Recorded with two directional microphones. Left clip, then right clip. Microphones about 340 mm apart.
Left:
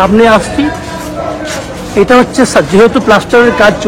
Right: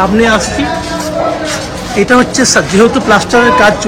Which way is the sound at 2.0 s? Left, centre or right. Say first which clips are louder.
Left 1 dB; centre.